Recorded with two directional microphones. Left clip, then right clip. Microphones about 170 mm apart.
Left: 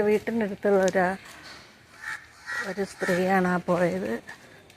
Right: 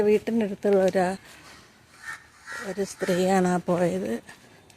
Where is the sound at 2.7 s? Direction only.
30° right (ahead or behind).